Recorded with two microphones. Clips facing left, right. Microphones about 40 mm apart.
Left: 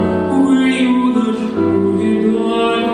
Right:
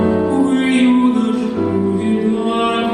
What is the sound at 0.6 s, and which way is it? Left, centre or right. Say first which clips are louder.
Music: right 1 dB; centre.